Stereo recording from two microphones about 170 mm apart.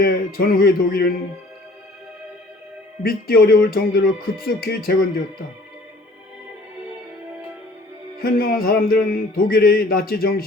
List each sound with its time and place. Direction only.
0.0 s music: 60° left (ahead or behind)
3.0 s music: 60° left (ahead or behind)
8.2 s music: 60° left (ahead or behind)